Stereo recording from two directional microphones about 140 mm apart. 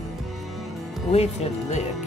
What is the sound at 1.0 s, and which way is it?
Speech, 50° left (ahead or behind).